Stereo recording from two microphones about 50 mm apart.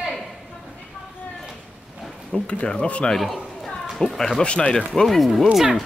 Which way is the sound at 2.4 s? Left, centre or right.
Centre.